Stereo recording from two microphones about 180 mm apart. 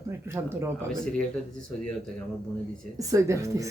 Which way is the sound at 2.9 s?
15° right (ahead or behind).